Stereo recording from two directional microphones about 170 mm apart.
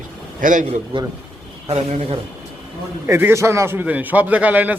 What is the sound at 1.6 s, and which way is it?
Speech, 35° right (ahead or behind).